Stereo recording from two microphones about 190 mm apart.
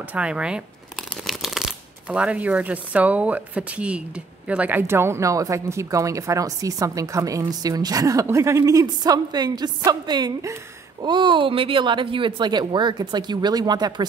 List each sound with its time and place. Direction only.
0.1 s speech: 5° right (ahead or behind); by 14.0 s 20° right (ahead or behind)